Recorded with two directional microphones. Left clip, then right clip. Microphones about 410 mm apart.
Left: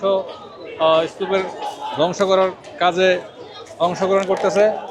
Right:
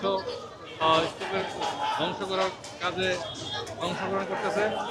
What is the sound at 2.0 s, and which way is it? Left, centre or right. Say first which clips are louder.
Speech: left 12 dB; left.